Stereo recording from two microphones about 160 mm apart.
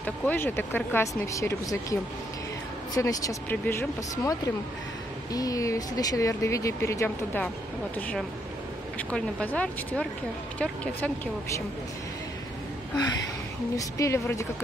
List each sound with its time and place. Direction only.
0.0 s speech: 10° left (ahead or behind)
3.0 s speech: 20° left (ahead or behind)
9.1 s speech: 10° left (ahead or behind)
13.7 s speech: 20° left (ahead or behind)